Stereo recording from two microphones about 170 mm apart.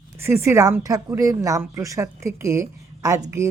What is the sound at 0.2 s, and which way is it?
A woman's voice, 15° right (ahead or behind).